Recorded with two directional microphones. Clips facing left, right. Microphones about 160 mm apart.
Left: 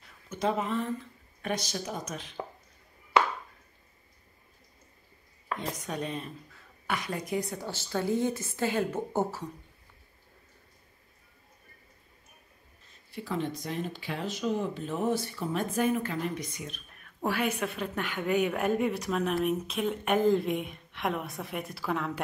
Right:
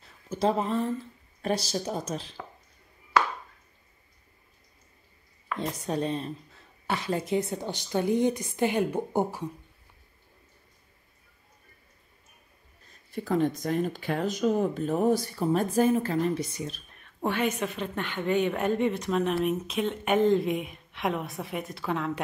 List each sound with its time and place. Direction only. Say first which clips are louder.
0.3 s speech: right 3 dB; 35° right (ahead or behind)
5.6 s a woman's voice: right 7 dB; 30° right (ahead or behind); by 9.5 s 15° right (ahead or behind)
13.1 s speech: right 7 dB; 45° right (ahead or behind)
16.9 s a sound: right 1 dB; 5° left (ahead or behind)
17.6 s speech: right 1 dB; 5° left (ahead or behind)